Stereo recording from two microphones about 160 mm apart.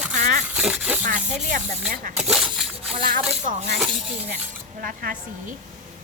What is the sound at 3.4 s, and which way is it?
Speech, 50° right (ahead or behind).